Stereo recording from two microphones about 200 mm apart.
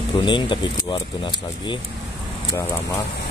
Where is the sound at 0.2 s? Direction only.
25° left (ahead or behind).